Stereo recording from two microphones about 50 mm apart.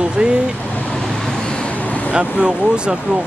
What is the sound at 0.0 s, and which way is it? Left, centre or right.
Vehicle, centre.